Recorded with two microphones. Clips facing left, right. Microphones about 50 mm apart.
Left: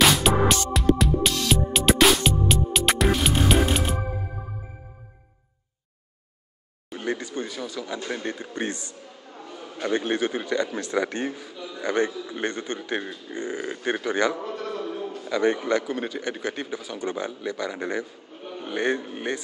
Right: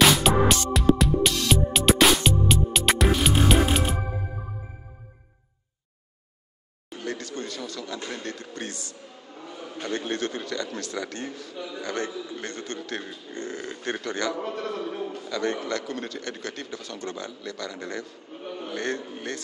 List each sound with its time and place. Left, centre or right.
0.0 s music: centre
7.0 s a man's voice: centre
11.5 s a man's voice: centre
11.8 s a man's voice: left
14.4 s a man's voice: right
15.2 s a man's voice: centre